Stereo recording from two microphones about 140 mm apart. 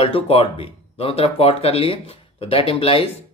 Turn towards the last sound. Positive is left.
turn(degrees=40)  # may be behind; listen again after turning